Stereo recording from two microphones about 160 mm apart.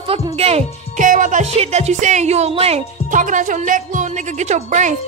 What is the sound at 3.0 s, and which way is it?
A woman's voice, 55° right (ahead or behind).